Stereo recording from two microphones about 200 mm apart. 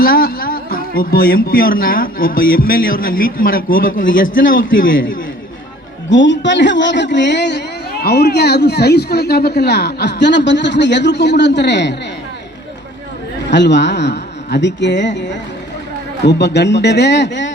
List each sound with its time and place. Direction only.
0.0 s a man's voice: 50° left (ahead or behind)
6.1 s speech: 65° left (ahead or behind)
13.5 s speech: 60° left (ahead or behind)